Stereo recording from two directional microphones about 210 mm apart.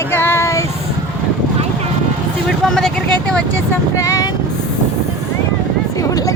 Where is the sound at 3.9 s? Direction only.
15° left (ahead or behind).